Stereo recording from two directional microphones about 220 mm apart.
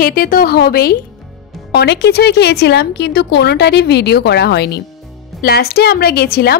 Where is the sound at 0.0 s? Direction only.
40° left (ahead or behind).